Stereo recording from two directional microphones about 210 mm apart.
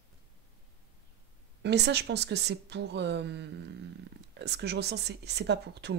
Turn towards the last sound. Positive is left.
turn(degrees=-50)  # may be behind; listen again after turning